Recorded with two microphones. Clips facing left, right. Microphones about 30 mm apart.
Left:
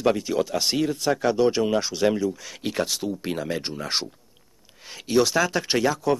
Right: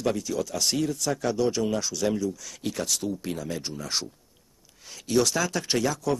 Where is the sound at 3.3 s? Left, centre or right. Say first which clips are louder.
Left 4 dB; left.